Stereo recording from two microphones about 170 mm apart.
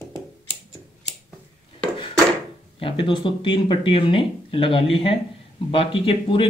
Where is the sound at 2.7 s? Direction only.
30° left (ahead or behind).